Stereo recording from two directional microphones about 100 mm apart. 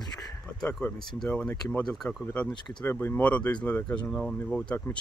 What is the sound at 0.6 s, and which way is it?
Speech, 5° left (ahead or behind).